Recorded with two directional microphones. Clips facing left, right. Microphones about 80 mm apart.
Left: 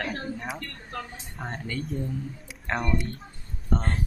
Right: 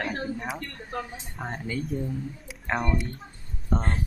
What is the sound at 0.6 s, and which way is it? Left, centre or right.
Speech, centre.